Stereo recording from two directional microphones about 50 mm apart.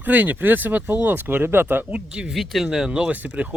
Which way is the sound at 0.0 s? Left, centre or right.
Right.